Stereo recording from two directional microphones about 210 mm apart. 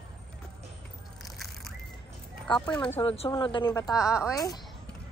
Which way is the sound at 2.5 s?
20° left (ahead or behind).